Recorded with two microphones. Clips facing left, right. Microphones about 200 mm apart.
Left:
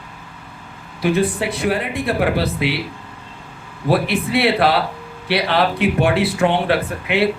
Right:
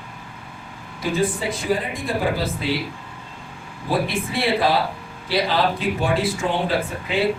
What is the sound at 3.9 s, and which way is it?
A man's voice, 65° left (ahead or behind).